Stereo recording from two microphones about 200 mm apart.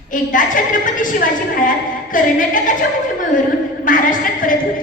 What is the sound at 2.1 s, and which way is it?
Speech, 40° left (ahead or behind).